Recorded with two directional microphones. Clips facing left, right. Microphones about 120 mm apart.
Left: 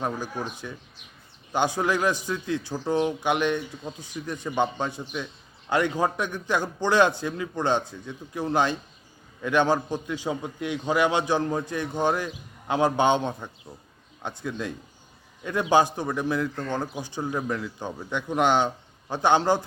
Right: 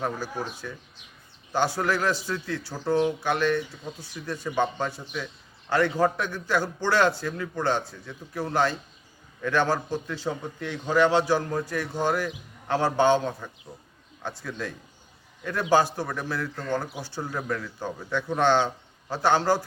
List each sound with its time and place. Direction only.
0.0 s a man's voice: 20° left (ahead or behind)
15.7 s a man's voice: 20° left (ahead or behind)